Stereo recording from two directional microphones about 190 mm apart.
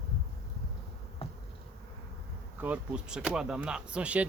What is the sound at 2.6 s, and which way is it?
Speech, 5° right (ahead or behind).